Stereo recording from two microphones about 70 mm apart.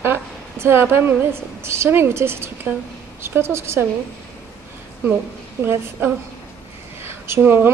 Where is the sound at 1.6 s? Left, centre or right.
Right.